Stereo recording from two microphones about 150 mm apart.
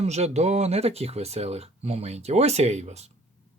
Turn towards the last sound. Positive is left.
turn(degrees=-45)  # may be behind; listen again after turning